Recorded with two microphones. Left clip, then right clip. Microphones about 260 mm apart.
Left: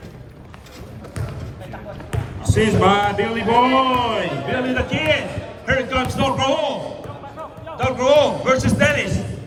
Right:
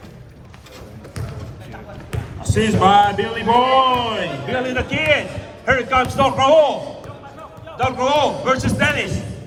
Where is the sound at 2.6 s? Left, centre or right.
Right.